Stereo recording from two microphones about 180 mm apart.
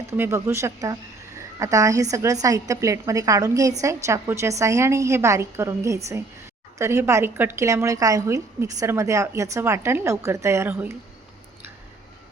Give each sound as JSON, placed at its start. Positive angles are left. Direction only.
{"t": 0.1, "sound": "a woman's voice", "side_deg": -15}